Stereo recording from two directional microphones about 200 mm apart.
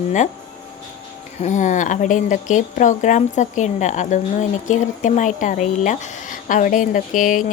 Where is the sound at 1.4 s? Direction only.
40° left (ahead or behind).